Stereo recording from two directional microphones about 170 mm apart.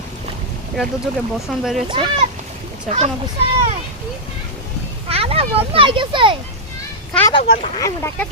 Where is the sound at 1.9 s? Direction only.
30° right (ahead or behind).